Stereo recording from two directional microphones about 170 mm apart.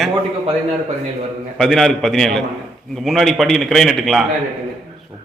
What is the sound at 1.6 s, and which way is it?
A man's voice, 5° left (ahead or behind).